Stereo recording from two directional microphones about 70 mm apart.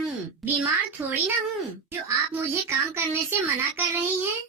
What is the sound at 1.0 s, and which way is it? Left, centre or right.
Speech, right.